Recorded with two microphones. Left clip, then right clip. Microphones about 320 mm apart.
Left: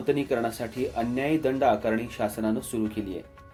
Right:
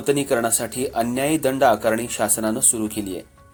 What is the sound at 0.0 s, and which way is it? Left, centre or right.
Speech, right.